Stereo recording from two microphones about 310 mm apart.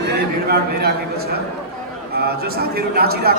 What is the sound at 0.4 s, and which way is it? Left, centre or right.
A man's voice, right.